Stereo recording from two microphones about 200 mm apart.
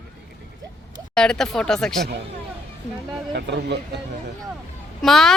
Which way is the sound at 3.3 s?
55° right (ahead or behind).